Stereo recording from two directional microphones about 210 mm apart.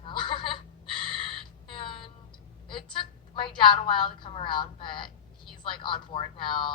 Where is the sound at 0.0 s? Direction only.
25° left (ahead or behind).